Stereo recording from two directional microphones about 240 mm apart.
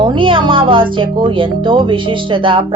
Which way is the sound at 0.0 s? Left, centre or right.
Right.